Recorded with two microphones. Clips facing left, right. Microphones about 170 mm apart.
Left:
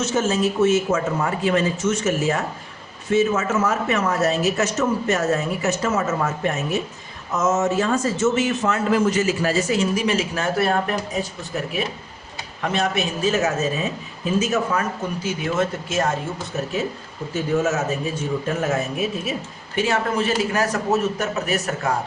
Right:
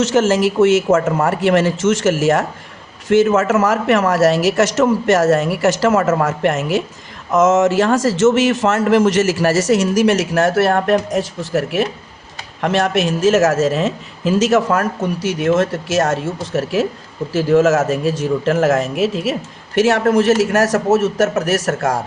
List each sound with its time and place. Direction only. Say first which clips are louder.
0.0 s a man's voice: right 6 dB; 90° right
1.3 s a man's voice: right 6 dB; 80° right
6.1 s a man's voice: right 7 dB; 70° right (ahead or behind)